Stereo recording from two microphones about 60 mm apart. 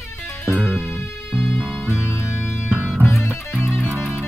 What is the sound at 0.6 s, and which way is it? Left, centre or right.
Music, centre.